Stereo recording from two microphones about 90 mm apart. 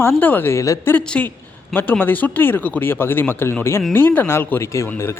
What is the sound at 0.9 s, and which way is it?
Speech, 15° left (ahead or behind).